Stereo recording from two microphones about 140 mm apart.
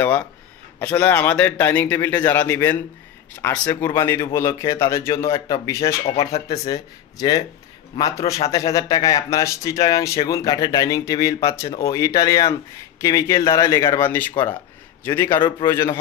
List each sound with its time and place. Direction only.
0.7 s a man's voice: 10° left (ahead or behind)